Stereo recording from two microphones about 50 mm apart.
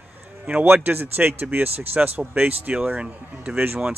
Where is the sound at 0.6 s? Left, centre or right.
Right.